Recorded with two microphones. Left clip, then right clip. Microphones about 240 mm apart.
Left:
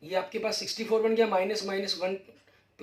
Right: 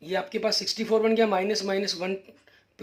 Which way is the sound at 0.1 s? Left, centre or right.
Right.